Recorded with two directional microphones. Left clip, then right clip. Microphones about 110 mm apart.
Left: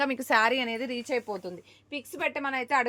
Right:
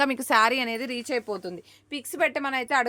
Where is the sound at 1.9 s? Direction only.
85° right.